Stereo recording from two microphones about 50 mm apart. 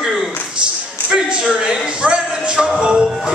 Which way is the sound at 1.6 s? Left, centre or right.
Centre.